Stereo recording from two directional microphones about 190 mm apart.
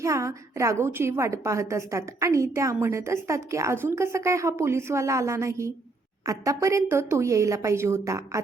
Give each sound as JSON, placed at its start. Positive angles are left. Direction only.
{"t": 0.0, "sound": "a woman's voice", "side_deg": -15}